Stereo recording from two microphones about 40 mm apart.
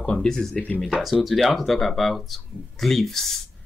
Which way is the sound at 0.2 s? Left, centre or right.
Centre.